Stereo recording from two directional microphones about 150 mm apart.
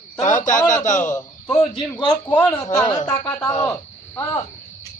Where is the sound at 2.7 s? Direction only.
20° left (ahead or behind).